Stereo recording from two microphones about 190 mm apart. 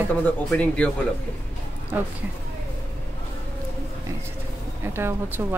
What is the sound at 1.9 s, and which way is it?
Speech, 10° right (ahead or behind).